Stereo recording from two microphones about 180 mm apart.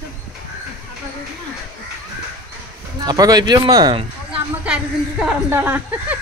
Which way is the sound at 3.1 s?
20° right (ahead or behind).